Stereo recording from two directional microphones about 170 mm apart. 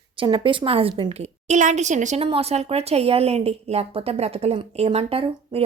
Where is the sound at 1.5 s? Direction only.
45° right (ahead or behind).